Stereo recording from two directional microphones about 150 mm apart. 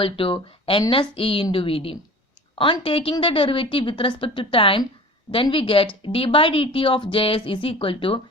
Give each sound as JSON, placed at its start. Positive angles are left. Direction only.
{"t": 0.0, "sound": "speech", "side_deg": 35}